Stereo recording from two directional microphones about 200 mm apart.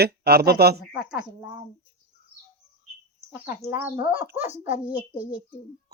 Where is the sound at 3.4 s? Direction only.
10° right (ahead or behind).